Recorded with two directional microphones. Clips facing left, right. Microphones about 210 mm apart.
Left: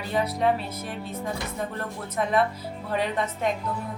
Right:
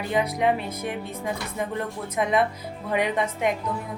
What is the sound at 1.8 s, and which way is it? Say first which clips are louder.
A woman's voice: right 2 dB; 15° right (ahead or behind).